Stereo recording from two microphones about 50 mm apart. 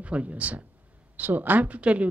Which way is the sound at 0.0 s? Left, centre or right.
Right.